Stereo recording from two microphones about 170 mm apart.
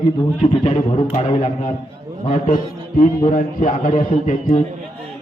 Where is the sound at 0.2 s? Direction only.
30° left (ahead or behind).